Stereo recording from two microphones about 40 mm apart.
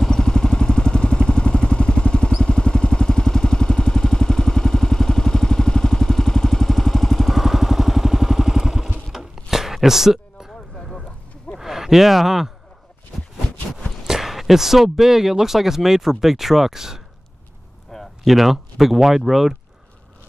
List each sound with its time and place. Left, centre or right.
0.1 s vehicle: centre
9.1 s a sound: centre
10.5 s a sound: centre
11.6 s speech: centre
13.7 s speech: centre
18.2 s speech: centre